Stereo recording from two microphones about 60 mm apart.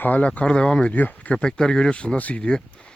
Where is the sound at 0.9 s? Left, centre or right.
Left.